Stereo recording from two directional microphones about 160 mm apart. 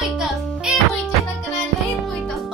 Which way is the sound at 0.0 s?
5° right (ahead or behind).